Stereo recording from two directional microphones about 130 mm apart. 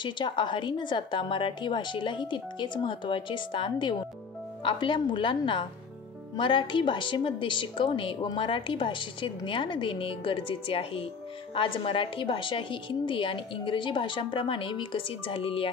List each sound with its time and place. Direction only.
0.0 s a woman's voice: 35° left (ahead or behind)